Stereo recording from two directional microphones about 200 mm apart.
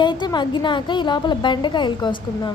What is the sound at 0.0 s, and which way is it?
A woman's voice, 20° left (ahead or behind).